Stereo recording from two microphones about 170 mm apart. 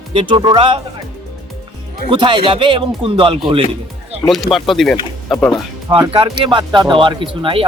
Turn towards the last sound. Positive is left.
turn(degrees=-30)  # may be behind; listen again after turning